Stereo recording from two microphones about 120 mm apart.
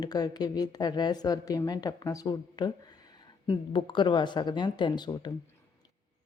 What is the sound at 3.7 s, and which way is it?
A woman's voice, 45° left (ahead or behind).